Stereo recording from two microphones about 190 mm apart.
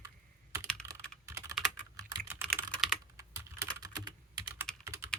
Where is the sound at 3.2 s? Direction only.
15° right (ahead or behind).